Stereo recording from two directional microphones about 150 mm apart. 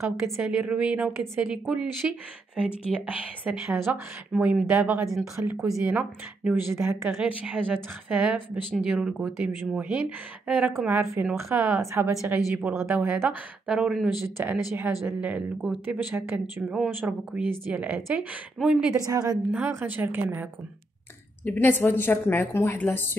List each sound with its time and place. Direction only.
0.2 s a woman's voice: 5° right (ahead or behind)
16.6 s a woman's voice: 5° right (ahead or behind)
19.0 s a woman's voice: 25° right (ahead or behind)
19.5 s a woman's voice: 15° right (ahead or behind)
21.5 s a woman's voice: 15° left (ahead or behind)